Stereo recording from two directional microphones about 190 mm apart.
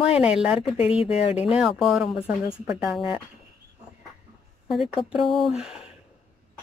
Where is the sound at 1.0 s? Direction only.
30° left (ahead or behind).